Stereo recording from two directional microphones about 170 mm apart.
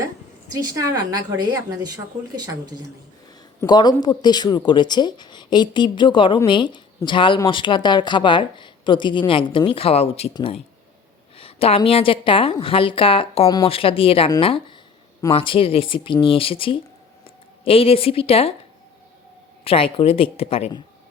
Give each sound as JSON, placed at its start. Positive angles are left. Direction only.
{"t": 0.5, "sound": "a woman's voice", "side_deg": -20}
{"t": 3.6, "sound": "a woman's voice", "side_deg": 25}
{"t": 19.6, "sound": "a woman's voice", "side_deg": 35}